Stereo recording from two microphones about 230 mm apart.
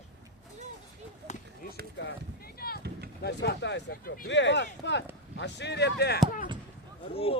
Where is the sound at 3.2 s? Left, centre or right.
Left.